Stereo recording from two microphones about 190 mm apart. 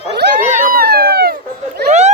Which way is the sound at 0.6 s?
50° right (ahead or behind).